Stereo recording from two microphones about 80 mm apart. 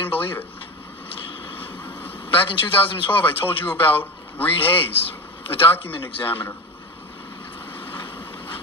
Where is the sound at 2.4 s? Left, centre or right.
Left.